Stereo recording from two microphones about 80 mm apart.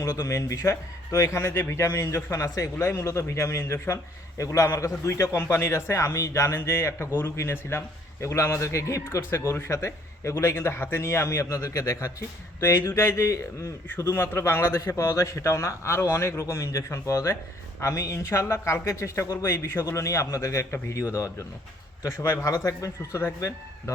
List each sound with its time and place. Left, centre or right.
0.0 s a man's voice: left
13.8 s a man's voice: left